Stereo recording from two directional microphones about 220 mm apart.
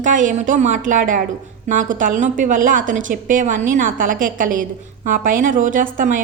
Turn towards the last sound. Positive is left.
turn(degrees=-35)  # may be behind; listen again after turning